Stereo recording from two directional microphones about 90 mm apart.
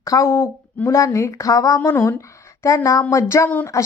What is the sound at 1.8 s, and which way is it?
Speech, 30° left (ahead or behind).